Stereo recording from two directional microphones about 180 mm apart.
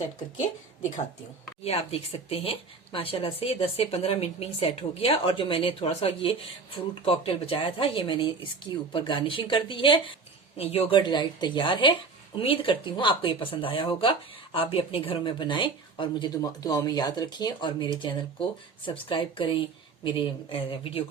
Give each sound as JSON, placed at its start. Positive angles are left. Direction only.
{"t": 1.6, "sound": "speech", "side_deg": 35}